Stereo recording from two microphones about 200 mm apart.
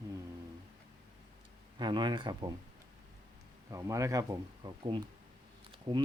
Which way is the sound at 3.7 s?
15° right (ahead or behind).